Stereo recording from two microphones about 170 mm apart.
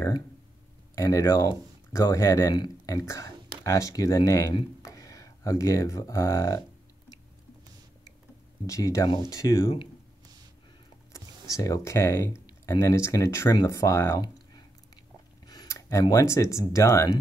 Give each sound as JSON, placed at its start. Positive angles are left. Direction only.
{"t": 0.9, "sound": "speech", "side_deg": 20}
{"t": 8.6, "sound": "speech", "side_deg": 20}
{"t": 11.1, "sound": "speech", "side_deg": 20}